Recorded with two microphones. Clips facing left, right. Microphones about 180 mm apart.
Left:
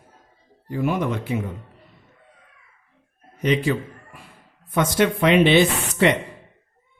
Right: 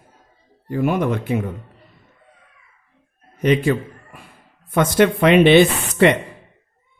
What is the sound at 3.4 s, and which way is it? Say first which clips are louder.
A man's voice: right 4 dB; 55° right (ahead or behind).